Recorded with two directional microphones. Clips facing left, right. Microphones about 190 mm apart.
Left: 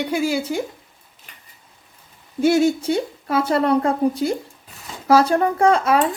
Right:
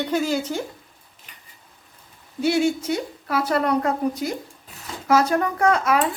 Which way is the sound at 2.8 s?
30° left (ahead or behind).